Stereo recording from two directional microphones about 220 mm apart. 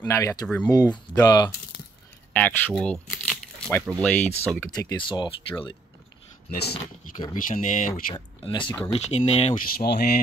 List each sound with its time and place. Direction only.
0.0 s speech: 10° left (ahead or behind)
2.3 s crumpling: 5° left (ahead or behind)
4.0 s speech: 5° left (ahead or behind); by 5.8 s 20° left (ahead or behind)
6.5 s speech: 45° left (ahead or behind)
7.4 s speech: 35° left (ahead or behind)
7.9 s speech: 20° left (ahead or behind)